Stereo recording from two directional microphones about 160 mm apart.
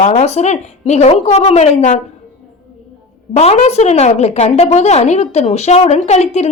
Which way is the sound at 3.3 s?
45° left (ahead or behind).